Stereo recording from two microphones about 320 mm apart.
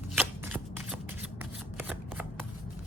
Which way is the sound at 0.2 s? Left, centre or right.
Centre.